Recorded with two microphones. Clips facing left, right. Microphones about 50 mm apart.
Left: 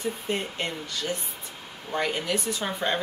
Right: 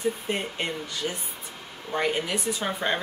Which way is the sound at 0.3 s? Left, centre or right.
Centre.